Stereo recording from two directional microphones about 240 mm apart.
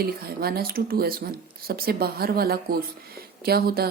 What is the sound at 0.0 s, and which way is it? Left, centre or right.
Speech, right.